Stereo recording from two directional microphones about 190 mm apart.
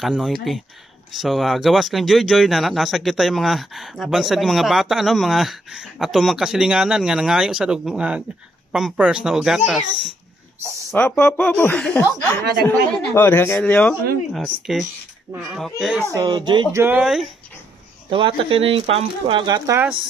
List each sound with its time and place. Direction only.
0.0 s speech: centre (ahead or behind)
10.9 s speech: 10° left (ahead or behind)
16.0 s speech: 15° right (ahead or behind)
16.8 s speech: 5° right (ahead or behind)
18.1 s speech: 30° right (ahead or behind); by 20.0 s 10° right (ahead or behind)